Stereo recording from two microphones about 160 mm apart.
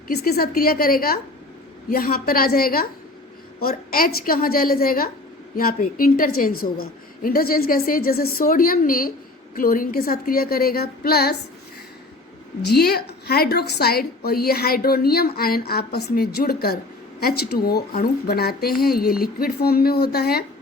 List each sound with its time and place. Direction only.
0.1 s a woman's voice: 75° left (ahead or behind)
12.6 s a woman's voice: 80° left